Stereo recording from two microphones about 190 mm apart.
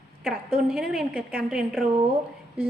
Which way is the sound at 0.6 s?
5° right (ahead or behind).